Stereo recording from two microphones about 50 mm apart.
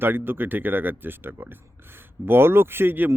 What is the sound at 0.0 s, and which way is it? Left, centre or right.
Speech, right.